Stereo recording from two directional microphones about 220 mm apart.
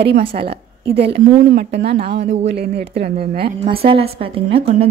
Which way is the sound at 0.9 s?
50° right (ahead or behind).